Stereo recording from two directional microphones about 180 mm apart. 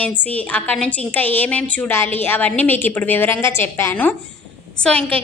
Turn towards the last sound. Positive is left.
turn(degrees=5)  # may be behind; listen again after turning